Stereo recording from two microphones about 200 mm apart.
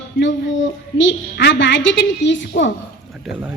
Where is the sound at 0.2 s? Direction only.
70° left (ahead or behind).